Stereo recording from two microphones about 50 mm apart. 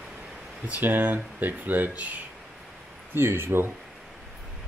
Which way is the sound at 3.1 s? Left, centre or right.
Right.